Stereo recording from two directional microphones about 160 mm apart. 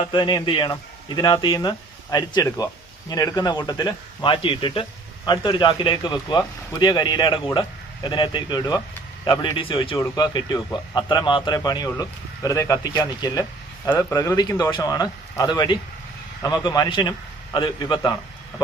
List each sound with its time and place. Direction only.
0.0 s speech: 30° left (ahead or behind)